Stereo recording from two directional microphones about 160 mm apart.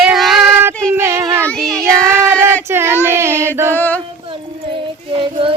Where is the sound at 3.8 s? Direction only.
10° left (ahead or behind).